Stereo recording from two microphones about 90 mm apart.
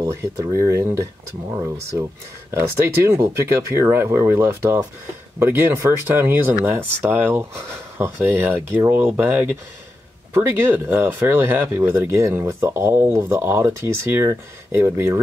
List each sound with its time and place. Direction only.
0.0 s speech: 35° right (ahead or behind)